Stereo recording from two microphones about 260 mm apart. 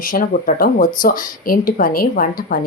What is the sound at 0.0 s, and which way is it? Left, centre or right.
A woman's voice, left.